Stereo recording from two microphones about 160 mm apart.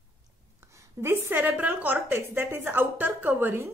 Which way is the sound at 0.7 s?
15° right (ahead or behind).